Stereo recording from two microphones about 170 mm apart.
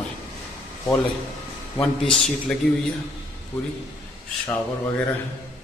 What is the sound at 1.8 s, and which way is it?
Speech, centre (ahead or behind).